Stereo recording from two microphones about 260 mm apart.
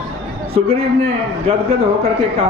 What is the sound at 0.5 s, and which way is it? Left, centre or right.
A man's voice, right.